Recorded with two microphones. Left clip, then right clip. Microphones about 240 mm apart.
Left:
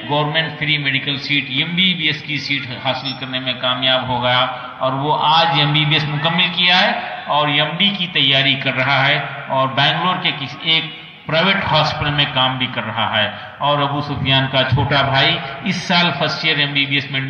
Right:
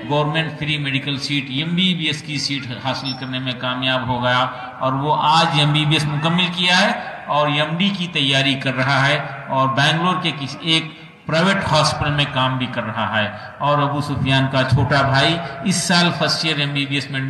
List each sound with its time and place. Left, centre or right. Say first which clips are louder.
0.1 s a man's voice: left 2 dB; right